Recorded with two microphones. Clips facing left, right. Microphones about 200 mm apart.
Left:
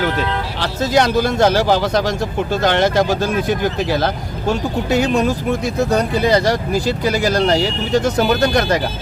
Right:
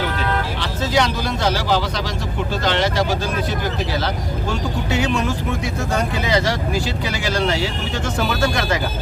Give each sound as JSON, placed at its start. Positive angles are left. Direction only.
{"t": 0.6, "sound": "speech", "side_deg": 45}
{"t": 4.9, "sound": "speech", "side_deg": 40}